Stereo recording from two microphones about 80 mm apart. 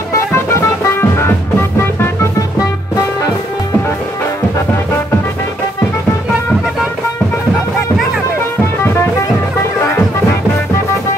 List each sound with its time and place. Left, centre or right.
0.1 s music: left